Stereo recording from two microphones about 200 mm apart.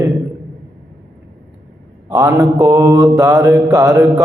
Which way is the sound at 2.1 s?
15° right (ahead or behind).